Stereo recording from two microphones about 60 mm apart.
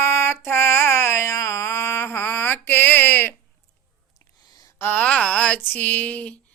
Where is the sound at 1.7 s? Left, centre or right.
Left.